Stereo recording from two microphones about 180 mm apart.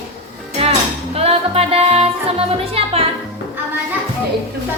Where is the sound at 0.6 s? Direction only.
35° right (ahead or behind).